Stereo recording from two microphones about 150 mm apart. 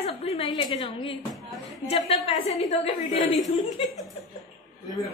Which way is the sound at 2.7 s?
60° left (ahead or behind).